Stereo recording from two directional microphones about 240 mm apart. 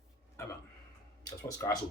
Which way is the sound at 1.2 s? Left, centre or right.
Centre.